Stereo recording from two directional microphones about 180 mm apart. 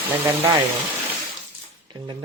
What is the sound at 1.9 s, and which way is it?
Speech, 25° right (ahead or behind).